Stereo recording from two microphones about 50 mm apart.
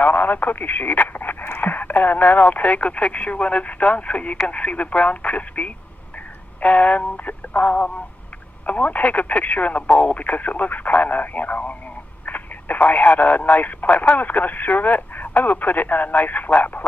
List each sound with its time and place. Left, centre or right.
0.0 s speech: left